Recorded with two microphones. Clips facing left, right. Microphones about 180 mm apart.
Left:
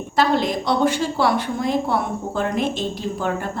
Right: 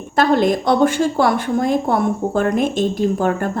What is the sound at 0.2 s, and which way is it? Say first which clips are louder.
A woman's voice: right 4 dB; 50° right (ahead or behind).